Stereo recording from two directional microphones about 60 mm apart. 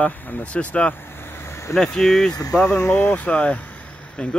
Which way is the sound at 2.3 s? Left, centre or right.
Left.